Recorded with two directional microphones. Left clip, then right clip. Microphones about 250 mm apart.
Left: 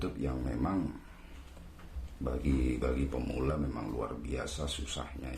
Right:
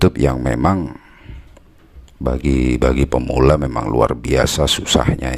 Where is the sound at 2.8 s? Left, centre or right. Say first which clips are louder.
Right 18 dB; right.